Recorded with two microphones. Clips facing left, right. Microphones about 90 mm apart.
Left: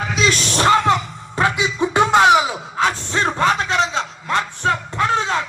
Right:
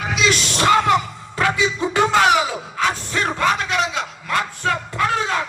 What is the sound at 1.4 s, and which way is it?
Music, 25° left (ahead or behind).